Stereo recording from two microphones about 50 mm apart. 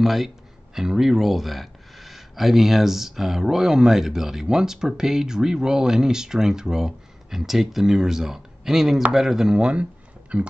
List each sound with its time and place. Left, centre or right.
0.0 s speech: centre; by 10.5 s right